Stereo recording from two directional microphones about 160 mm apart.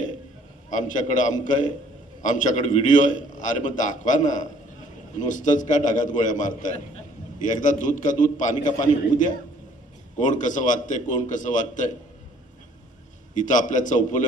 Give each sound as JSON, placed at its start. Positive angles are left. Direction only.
{"t": 0.7, "sound": "a man's voice", "side_deg": 50}
{"t": 7.4, "sound": "a man's voice", "side_deg": 50}
{"t": 8.5, "sound": "a man's voice", "side_deg": 30}
{"t": 10.2, "sound": "a man's voice", "side_deg": 50}
{"t": 13.3, "sound": "a man's voice", "side_deg": 50}